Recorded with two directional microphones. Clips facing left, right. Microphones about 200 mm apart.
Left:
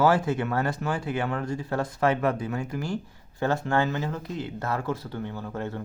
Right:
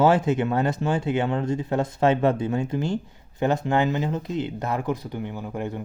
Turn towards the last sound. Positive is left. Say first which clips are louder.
# right 2 dB
turn(degrees=-15)  # may be behind; listen again after turning